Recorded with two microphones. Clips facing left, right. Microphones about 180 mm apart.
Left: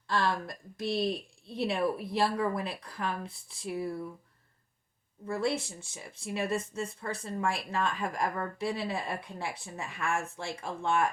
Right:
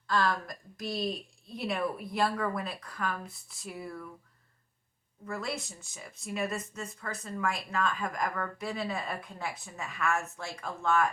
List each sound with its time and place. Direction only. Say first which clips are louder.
0.1 s speech: right 1 dB; 25° left (ahead or behind)
5.2 s speech: left 5 dB; 30° left (ahead or behind)